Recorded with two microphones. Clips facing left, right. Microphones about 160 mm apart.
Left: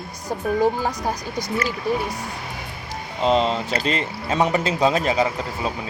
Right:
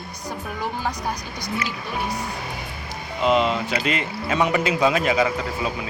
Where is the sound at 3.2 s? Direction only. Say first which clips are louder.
Even; 30° left (ahead or behind).